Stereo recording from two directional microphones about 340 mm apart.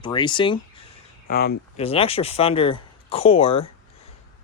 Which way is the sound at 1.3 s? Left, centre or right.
Left.